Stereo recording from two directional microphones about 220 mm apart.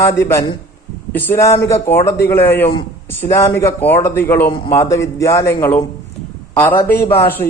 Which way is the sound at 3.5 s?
10° left (ahead or behind).